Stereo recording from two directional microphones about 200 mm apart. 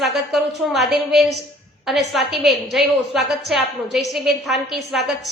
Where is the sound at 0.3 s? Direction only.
Centre (ahead or behind).